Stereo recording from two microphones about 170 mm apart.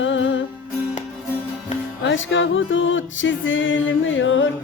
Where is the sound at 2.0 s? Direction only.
90° left.